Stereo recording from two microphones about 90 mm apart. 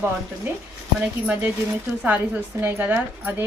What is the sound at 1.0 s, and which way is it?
A woman's voice, 15° right (ahead or behind).